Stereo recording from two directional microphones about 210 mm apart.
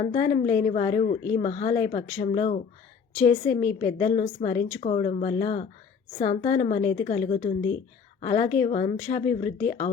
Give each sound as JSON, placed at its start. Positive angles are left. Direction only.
{"t": 0.0, "sound": "a woman's voice", "side_deg": 30}
{"t": 4.0, "sound": "a woman's voice", "side_deg": 35}
{"t": 8.4, "sound": "speech", "side_deg": 35}